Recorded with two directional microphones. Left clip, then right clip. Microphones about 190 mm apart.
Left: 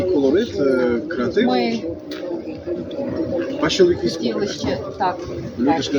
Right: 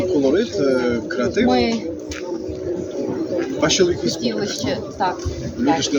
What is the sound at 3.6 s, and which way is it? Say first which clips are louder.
Speech: left 1 dB; 20° right (ahead or behind).